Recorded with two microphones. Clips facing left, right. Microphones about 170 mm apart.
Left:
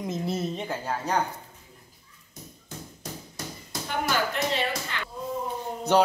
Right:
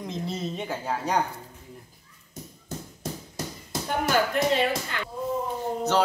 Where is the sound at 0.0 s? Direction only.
5° left (ahead or behind).